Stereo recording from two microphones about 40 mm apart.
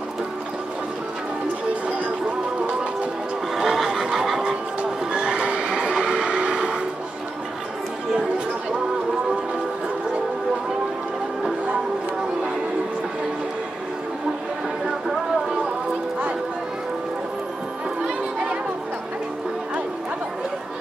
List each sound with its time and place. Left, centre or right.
3.5 s music: centre
5.1 s neigh: right
18.0 s a sound: right